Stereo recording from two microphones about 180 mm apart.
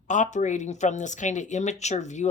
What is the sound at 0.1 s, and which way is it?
Speech, 45° left (ahead or behind).